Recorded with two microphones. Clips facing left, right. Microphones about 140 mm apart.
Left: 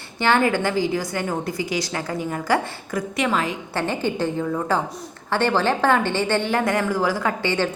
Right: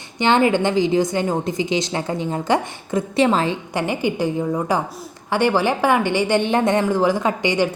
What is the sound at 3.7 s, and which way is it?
A woman's voice, 15° right (ahead or behind).